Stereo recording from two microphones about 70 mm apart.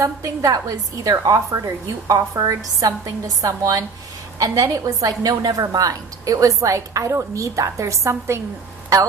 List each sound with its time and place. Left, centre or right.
0.0 s a woman's voice: right